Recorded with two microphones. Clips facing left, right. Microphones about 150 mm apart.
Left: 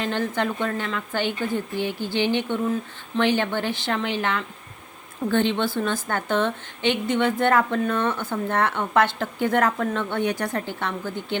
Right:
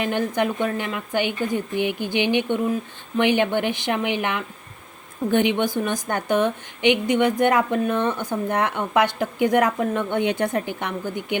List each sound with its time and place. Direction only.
0.0 s a woman's voice: 15° right (ahead or behind)